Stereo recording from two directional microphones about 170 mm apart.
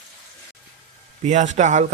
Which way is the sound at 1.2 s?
45° right (ahead or behind).